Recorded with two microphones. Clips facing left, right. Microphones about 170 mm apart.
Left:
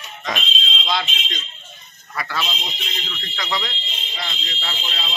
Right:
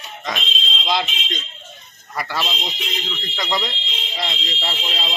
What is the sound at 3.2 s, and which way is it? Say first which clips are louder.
Speech: right 2 dB; 20° right (ahead or behind).